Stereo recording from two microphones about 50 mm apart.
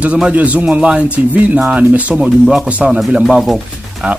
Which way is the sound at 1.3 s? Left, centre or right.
Right.